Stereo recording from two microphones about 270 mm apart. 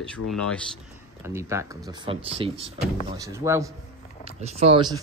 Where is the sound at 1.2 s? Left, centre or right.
Centre.